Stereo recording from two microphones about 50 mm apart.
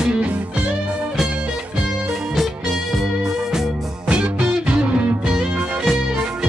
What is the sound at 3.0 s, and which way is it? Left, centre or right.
Music, centre.